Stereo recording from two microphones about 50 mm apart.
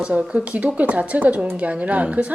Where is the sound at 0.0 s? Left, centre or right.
Right.